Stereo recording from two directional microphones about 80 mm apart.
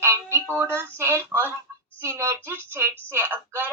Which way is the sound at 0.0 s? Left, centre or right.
Right.